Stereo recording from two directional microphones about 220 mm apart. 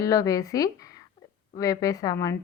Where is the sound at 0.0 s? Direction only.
15° left (ahead or behind).